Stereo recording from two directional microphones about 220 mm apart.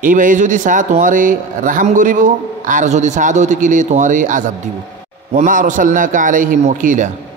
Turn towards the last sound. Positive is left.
turn(degrees=-35)  # may be behind; listen again after turning